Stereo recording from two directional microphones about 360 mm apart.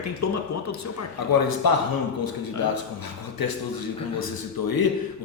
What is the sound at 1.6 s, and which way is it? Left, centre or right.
Speech, left.